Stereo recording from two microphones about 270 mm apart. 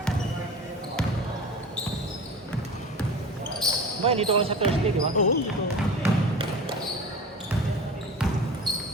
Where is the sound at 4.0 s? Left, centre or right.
Right.